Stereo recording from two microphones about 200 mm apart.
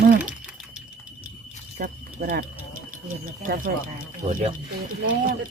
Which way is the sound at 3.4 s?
45° right (ahead or behind).